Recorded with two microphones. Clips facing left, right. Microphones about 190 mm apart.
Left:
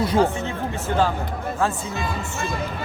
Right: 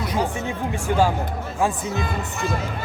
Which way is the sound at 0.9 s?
10° right (ahead or behind).